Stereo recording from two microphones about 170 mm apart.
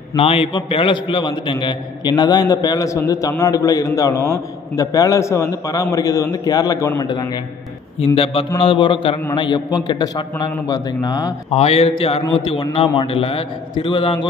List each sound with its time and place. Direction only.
0.1 s a man's voice: 35° left (ahead or behind)
11.5 s a man's voice: 35° left (ahead or behind)